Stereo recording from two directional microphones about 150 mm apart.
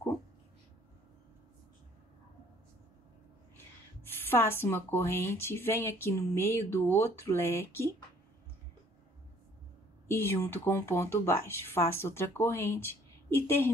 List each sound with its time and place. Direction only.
4.0 s speech: 15° left (ahead or behind)
10.0 s speech: 15° left (ahead or behind)